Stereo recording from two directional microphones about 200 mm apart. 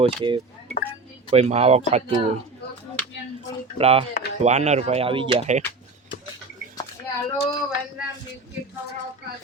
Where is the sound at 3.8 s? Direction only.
30° right (ahead or behind).